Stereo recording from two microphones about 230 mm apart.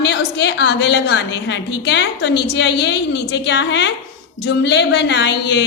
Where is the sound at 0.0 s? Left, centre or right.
Left.